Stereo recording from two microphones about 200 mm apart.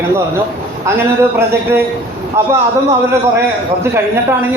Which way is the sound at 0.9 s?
10° right (ahead or behind).